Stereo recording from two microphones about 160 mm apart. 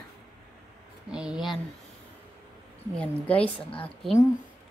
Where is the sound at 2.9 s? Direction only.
10° left (ahead or behind).